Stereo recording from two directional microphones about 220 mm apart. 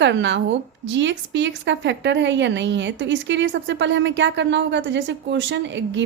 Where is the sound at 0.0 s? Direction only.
55° right (ahead or behind).